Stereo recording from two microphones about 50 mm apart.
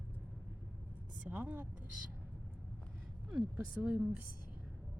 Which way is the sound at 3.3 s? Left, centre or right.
Right.